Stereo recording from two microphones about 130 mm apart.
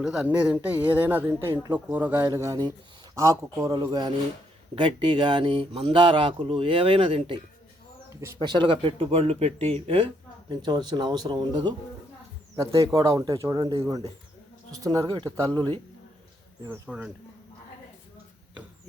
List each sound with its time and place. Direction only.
0.0 s speech: 5° right (ahead or behind)
2.2 s speech: 25° right (ahead or behind); by 7.3 s 40° right (ahead or behind)
8.4 s speech: 35° right (ahead or behind)
10.5 s speech: 35° right (ahead or behind)
12.8 s speech: 25° right (ahead or behind)
14.8 s speech: 30° right (ahead or behind)
16.6 s speech: 15° right (ahead or behind)